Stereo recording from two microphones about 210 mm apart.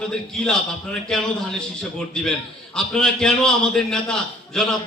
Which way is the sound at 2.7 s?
5° left (ahead or behind).